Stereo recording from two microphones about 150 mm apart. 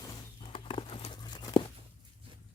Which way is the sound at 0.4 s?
35° left (ahead or behind).